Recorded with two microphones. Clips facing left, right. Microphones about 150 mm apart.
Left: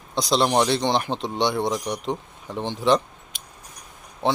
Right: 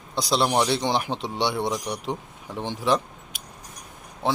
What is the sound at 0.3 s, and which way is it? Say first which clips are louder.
Speech: left 2 dB; 5° right (ahead or behind).